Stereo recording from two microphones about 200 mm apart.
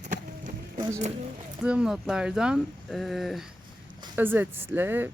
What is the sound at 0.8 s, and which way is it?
Music, 40° right (ahead or behind).